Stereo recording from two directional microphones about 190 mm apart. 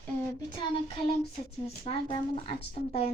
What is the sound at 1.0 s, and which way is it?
A woman's voice, 30° left (ahead or behind).